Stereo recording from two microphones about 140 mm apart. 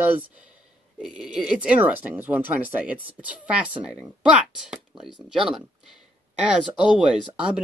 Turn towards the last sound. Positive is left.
turn(degrees=-5)  # may be behind; listen again after turning